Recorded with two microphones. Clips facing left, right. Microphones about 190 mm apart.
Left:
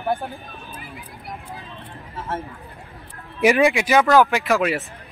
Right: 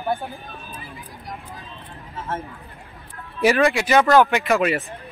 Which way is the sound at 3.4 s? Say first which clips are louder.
Left 1 dB; 15° left (ahead or behind).